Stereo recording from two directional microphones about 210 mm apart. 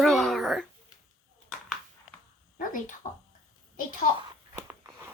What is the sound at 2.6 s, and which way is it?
Speech, 40° left (ahead or behind).